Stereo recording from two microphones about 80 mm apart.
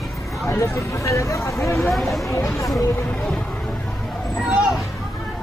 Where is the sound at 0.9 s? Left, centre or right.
Left.